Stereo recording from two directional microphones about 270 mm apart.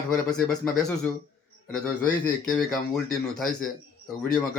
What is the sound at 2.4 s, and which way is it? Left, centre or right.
Speech, centre.